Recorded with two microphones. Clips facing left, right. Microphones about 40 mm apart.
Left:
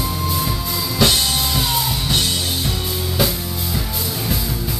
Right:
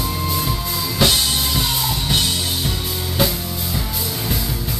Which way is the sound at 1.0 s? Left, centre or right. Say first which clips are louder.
Left 1 dB; centre.